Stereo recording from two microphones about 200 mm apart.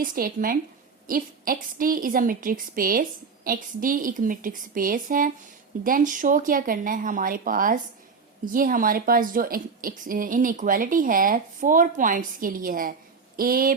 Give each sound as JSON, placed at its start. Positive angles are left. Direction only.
{"t": 0.0, "sound": "a woman's voice", "side_deg": -45}